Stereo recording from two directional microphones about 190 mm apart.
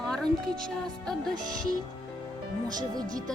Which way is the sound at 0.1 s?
5° left (ahead or behind).